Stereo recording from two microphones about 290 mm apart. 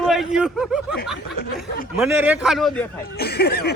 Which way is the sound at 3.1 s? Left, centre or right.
Left.